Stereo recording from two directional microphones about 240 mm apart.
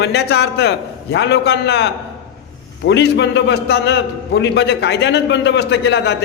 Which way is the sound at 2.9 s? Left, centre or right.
Left.